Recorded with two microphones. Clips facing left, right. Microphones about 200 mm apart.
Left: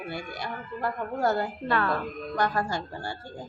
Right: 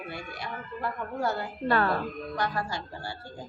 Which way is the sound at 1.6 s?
35° right (ahead or behind).